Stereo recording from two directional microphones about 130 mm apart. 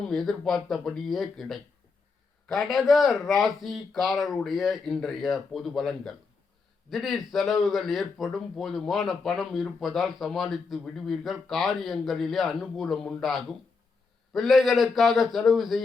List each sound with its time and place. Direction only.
0.1 s speech: centre (ahead or behind)